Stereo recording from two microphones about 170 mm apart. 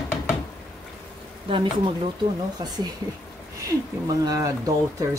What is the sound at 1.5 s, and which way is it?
Speech, 30° right (ahead or behind).